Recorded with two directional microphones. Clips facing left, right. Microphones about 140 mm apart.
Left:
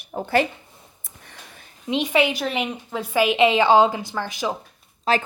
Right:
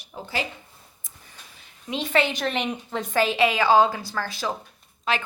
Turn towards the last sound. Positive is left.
turn(degrees=35)  # may be behind; listen again after turning